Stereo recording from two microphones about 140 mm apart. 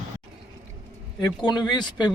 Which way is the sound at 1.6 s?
30° left (ahead or behind).